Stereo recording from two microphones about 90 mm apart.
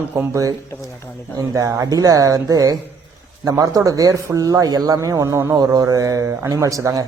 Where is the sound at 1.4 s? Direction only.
40° right (ahead or behind).